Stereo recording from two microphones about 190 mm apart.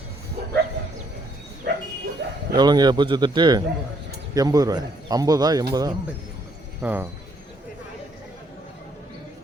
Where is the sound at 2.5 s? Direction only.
20° right (ahead or behind).